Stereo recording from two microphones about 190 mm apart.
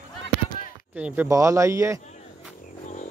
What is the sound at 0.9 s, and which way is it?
Speech, 10° right (ahead or behind).